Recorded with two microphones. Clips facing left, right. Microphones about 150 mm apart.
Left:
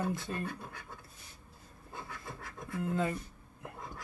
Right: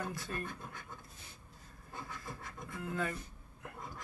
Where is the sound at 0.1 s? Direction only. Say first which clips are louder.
Left 4 dB; 25° left (ahead or behind).